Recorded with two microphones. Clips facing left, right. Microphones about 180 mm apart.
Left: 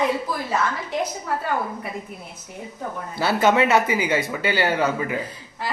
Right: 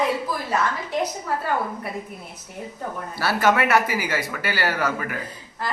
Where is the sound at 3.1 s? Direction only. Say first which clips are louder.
Left 2 dB; 20° left (ahead or behind).